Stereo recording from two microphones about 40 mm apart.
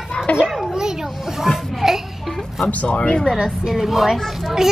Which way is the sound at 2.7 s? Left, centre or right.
Left.